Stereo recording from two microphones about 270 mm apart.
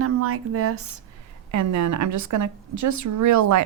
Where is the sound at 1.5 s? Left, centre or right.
Right.